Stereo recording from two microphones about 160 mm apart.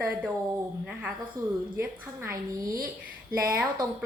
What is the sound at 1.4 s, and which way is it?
Speech, 20° right (ahead or behind).